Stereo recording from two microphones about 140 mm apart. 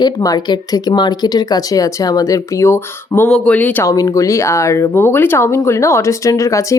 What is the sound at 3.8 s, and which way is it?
Speech, 25° left (ahead or behind).